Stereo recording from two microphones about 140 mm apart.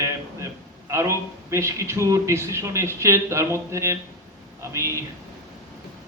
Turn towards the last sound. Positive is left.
turn(degrees=-20)  # may be behind; listen again after turning